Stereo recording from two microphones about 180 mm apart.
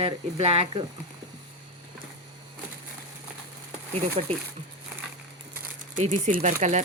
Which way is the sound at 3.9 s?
35° right (ahead or behind).